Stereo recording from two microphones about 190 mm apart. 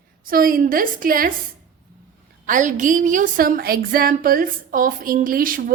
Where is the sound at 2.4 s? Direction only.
45° right (ahead or behind).